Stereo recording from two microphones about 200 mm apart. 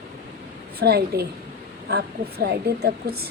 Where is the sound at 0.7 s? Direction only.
55° right (ahead or behind).